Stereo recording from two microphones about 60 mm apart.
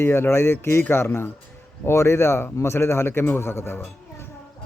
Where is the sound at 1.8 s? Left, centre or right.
Left.